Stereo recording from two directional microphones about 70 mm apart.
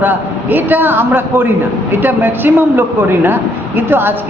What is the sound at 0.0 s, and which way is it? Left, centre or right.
A woman's voice, right.